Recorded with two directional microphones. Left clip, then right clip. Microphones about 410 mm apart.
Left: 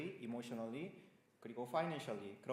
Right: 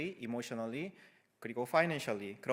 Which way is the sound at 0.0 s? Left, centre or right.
Right.